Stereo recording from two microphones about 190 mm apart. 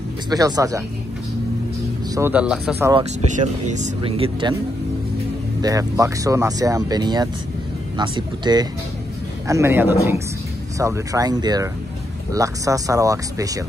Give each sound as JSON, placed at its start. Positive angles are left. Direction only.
{"t": 0.3, "sound": "speech", "side_deg": -20}
{"t": 2.1, "sound": "speech", "side_deg": -10}
{"t": 3.3, "sound": "speech", "side_deg": -40}
{"t": 5.6, "sound": "speech", "side_deg": -20}